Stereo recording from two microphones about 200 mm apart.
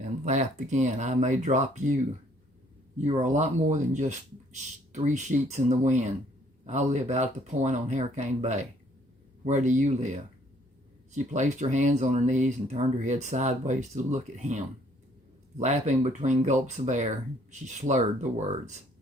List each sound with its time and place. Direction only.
0.0 s speech: 35° right (ahead or behind)
3.2 s speech: 35° right (ahead or behind)
11.1 s speech: 35° right (ahead or behind)